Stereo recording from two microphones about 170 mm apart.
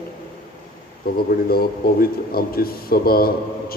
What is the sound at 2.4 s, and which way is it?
Speech, 60° left (ahead or behind).